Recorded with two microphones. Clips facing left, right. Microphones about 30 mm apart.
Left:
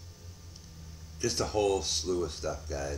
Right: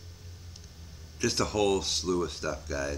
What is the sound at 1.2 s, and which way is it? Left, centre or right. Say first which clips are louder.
Speech: right 2 dB; right.